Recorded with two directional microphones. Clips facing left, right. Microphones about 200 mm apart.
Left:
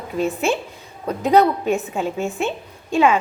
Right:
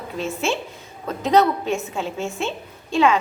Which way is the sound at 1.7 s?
15° left (ahead or behind).